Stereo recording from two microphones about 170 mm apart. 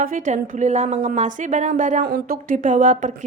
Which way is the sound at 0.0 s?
50° right (ahead or behind).